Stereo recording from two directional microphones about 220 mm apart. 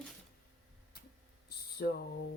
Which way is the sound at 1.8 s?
45° left (ahead or behind).